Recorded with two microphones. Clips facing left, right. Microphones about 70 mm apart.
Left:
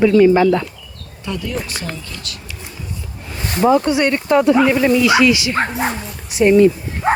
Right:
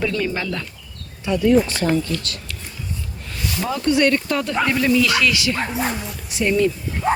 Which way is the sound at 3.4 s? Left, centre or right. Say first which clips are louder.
Left 3 dB; left.